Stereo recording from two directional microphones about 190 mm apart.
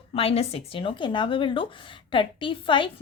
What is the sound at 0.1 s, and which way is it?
A woman's voice, 30° left (ahead or behind).